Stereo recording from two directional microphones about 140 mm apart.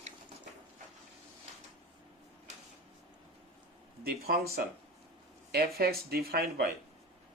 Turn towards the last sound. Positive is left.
turn(degrees=-90)